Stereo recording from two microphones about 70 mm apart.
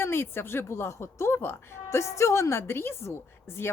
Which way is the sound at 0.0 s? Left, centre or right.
Left.